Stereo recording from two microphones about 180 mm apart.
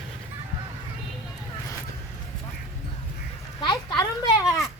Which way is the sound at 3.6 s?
25° left (ahead or behind).